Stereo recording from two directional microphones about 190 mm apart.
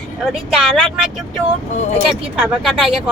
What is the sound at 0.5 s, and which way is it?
Speech, 5° right (ahead or behind).